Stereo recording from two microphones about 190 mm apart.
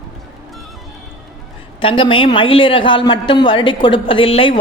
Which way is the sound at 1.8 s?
30° left (ahead or behind).